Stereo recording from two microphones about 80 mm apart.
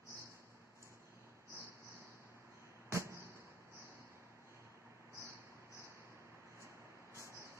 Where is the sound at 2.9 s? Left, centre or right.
Right.